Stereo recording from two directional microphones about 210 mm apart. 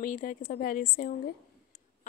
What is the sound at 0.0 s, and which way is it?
A woman's voice, 40° left (ahead or behind).